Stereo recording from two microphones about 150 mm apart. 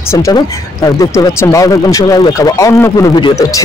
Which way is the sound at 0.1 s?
25° left (ahead or behind).